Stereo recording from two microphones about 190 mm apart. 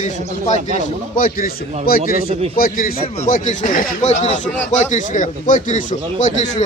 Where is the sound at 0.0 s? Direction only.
40° left (ahead or behind).